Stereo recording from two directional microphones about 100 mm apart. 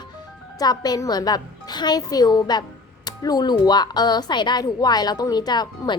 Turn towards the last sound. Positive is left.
turn(degrees=45)  # may be behind; listen again after turning